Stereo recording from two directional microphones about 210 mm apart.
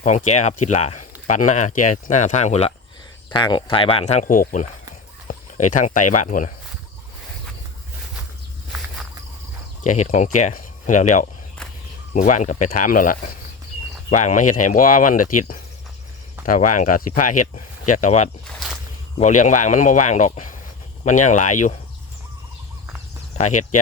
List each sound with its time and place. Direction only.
0.0 s speech: 35° left (ahead or behind)
9.8 s speech: 35° left (ahead or behind)
16.5 s speech: 40° left (ahead or behind)
18.4 s a sound: centre (ahead or behind)
19.2 s speech: 35° left (ahead or behind)
23.4 s speech: 35° left (ahead or behind)